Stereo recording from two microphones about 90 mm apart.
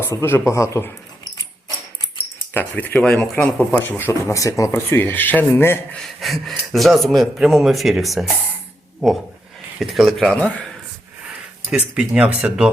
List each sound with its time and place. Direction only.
0.0 s speech: 25° left (ahead or behind)
2.5 s speech: 20° left (ahead or behind)
3.0 s speech: 5° left (ahead or behind)
3.3 s speech: 20° left (ahead or behind); by 4.8 s 35° left (ahead or behind)
4.9 s speech: 25° left (ahead or behind)
5.9 s speech: 5° left (ahead or behind)
11.8 s speech: 15° right (ahead or behind)